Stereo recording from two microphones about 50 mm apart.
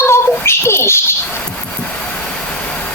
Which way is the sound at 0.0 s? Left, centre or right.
Left.